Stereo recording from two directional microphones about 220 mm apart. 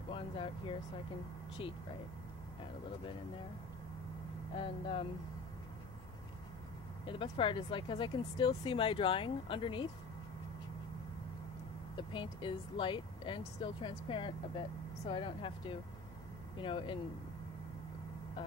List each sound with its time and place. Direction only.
0.1 s speech: 25° left (ahead or behind)
4.6 s speech: 25° left (ahead or behind)
7.1 s speech: 25° left (ahead or behind)
12.1 s speech: 20° left (ahead or behind)